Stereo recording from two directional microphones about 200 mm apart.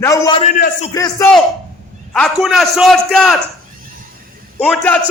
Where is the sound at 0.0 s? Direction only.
20° left (ahead or behind).